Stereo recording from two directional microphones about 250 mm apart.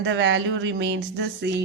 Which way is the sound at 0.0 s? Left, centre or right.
Right.